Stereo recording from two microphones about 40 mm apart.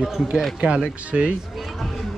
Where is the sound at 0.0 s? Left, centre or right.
Centre.